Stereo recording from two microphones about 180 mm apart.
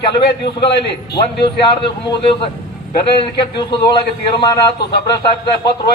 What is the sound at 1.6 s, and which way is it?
A man's voice, 30° left (ahead or behind).